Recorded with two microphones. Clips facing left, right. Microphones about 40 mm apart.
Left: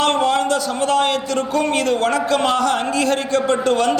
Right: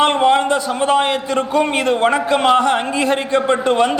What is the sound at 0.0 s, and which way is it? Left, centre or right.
A man's voice, right.